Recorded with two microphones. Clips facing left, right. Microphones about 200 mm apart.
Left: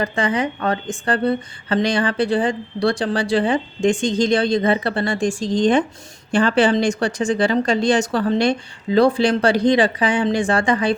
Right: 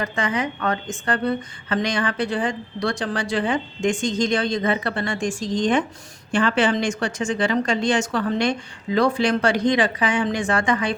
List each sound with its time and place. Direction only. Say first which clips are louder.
0.0 s a woman's voice: left 4 dB; 30° left (ahead or behind)